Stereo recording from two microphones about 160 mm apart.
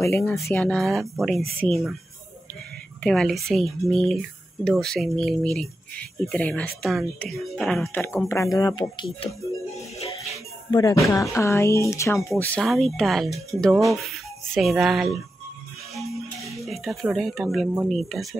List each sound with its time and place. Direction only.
0.0 s speech: 15° left (ahead or behind)
3.0 s speech: centre (ahead or behind)
8.3 s speech: 20° left (ahead or behind)
10.7 s speech: 20° left (ahead or behind)
12.5 s speech: centre (ahead or behind)
15.9 s marimba: centre (ahead or behind)
16.6 s speech: centre (ahead or behind)